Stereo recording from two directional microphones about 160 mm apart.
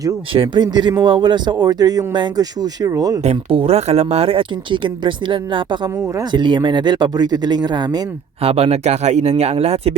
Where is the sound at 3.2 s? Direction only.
40° right (ahead or behind).